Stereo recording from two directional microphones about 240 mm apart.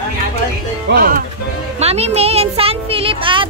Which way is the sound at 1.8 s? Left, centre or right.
Right.